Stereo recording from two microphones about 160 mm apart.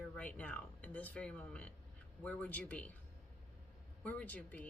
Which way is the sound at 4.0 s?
10° left (ahead or behind).